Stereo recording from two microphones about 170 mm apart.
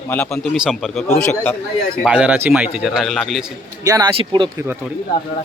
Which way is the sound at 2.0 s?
5° right (ahead or behind).